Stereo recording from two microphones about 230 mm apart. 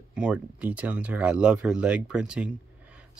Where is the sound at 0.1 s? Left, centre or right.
Centre.